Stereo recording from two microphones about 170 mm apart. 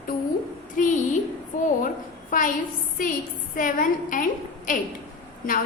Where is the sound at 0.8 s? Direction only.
50° left (ahead or behind).